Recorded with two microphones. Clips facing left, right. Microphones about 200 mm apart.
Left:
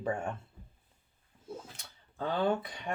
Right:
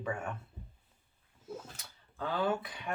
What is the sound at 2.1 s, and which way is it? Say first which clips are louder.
Speech: left 2 dB; 30° left (ahead or behind).